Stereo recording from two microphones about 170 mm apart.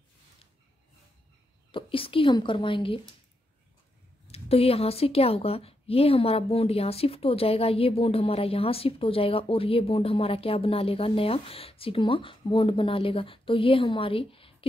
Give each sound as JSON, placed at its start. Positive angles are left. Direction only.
{"t": 1.7, "sound": "a woman's voice", "side_deg": 30}
{"t": 4.3, "sound": "a woman's voice", "side_deg": 35}